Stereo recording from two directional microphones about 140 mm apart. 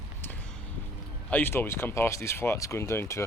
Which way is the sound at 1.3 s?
15° left (ahead or behind).